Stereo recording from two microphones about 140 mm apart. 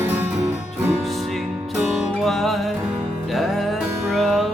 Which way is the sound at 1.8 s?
5° right (ahead or behind).